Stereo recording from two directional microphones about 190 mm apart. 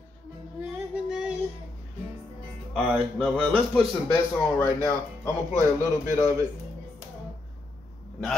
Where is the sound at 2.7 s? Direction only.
5° left (ahead or behind).